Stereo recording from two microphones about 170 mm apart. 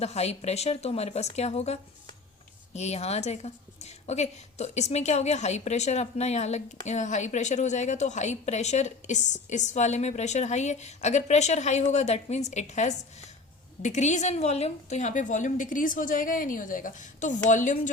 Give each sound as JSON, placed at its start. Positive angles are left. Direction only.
{"t": 0.0, "sound": "a woman's voice", "side_deg": 40}